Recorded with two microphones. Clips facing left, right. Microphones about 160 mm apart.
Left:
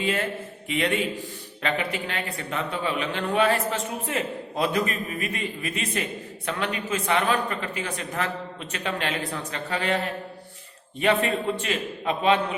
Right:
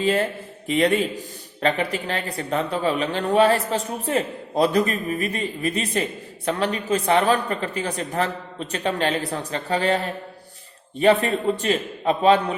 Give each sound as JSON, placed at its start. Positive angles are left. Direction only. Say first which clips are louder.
{"t": 0.0, "sound": "a man's voice", "louder": "right 5 dB", "side_deg": -35}
{"t": 11.0, "sound": "a man's voice", "louder": "right 5 dB", "side_deg": -35}